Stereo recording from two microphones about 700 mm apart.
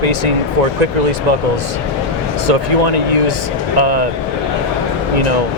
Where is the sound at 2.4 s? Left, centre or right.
Right.